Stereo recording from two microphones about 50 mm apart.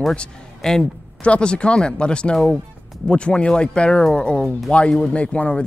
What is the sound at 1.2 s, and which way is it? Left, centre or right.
A man's voice, left.